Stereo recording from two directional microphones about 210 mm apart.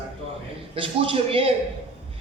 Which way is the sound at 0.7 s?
25° right (ahead or behind).